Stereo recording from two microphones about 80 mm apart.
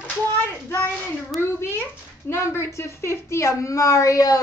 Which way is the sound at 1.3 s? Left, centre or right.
Left.